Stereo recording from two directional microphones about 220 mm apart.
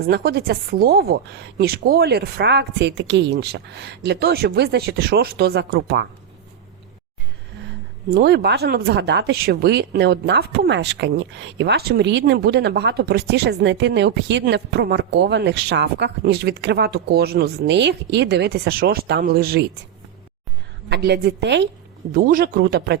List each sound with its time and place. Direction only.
0.0 s speech: 45° right (ahead or behind)
8.1 s speech: 45° right (ahead or behind)
20.9 s speech: 45° right (ahead or behind)
22.1 s a man's voice: 40° right (ahead or behind)